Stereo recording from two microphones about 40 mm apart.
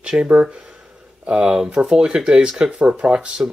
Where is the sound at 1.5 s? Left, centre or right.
Centre.